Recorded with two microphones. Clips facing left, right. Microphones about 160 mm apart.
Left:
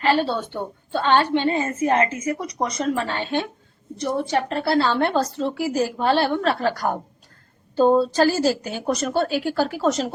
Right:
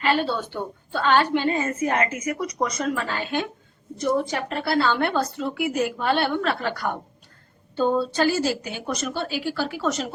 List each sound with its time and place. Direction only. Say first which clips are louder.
0.0 s a woman's voice: left 2 dB; 30° left (ahead or behind)